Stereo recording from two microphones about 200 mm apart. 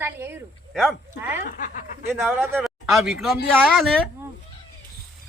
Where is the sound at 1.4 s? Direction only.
40° left (ahead or behind).